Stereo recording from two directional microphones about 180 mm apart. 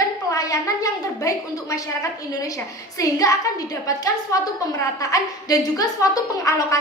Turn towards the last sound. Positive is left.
turn(degrees=15)  # may be behind; listen again after turning